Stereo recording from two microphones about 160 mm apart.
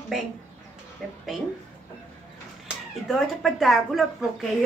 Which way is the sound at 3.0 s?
Centre (ahead or behind).